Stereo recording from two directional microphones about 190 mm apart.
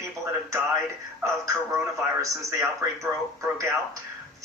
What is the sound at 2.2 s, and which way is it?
Speech, 15° right (ahead or behind).